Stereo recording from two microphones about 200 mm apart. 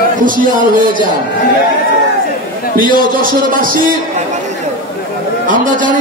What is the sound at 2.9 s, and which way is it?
Speech, 45° right (ahead or behind).